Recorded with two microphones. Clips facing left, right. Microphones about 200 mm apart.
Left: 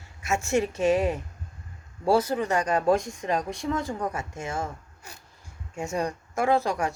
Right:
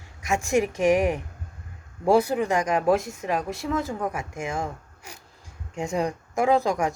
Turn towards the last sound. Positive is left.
turn(degrees=-15)  # may be behind; listen again after turning